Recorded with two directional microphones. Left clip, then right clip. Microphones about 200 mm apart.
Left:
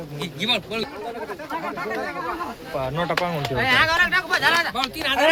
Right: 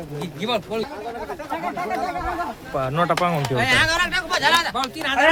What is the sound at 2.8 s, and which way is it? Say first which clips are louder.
Speech: right 3 dB; 50° right (ahead or behind).